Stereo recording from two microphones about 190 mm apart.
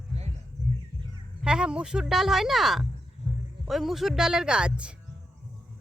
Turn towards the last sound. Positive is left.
turn(degrees=-5)  # may be behind; listen again after turning